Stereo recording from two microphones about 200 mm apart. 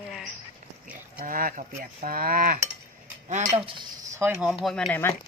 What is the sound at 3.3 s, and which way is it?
Speech, 35° right (ahead or behind).